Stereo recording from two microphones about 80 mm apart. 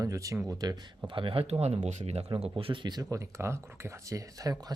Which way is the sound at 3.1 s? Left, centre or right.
Right.